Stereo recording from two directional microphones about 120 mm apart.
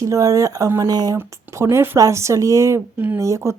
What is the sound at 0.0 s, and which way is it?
Speech, 30° right (ahead or behind).